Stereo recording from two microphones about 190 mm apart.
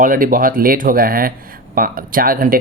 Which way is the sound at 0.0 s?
45° right (ahead or behind).